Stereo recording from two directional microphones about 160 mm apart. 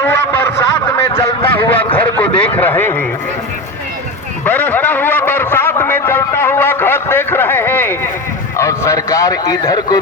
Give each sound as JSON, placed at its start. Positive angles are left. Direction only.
{"t": 0.0, "sound": "snicker", "side_deg": 15}
{"t": 1.1, "sound": "honk", "side_deg": 35}
{"t": 2.0, "sound": "speech", "side_deg": 10}
{"t": 4.4, "sound": "a man's voice", "side_deg": 10}